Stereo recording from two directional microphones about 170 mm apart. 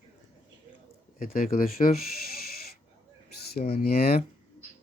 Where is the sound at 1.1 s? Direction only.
55° left (ahead or behind).